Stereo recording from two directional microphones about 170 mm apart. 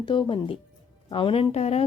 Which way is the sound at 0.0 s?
30° left (ahead or behind).